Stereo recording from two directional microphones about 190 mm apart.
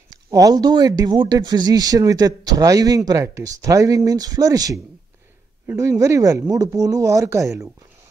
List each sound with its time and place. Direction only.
0.1 s speech: 20° right (ahead or behind)